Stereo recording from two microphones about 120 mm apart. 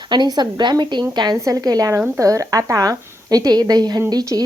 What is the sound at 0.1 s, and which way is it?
A woman's voice, 35° right (ahead or behind).